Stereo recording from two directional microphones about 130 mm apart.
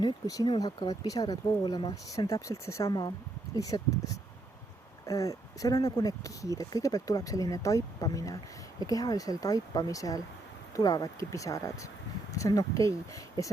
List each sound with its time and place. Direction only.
0.0 s speech: 30° left (ahead or behind)